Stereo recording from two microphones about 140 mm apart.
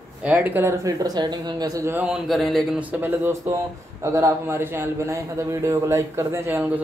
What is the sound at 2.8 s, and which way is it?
A man's voice, 15° right (ahead or behind).